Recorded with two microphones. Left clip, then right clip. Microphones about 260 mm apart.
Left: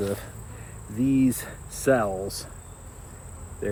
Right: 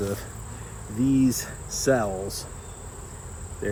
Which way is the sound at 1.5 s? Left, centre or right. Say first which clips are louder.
Left 1 dB; centre.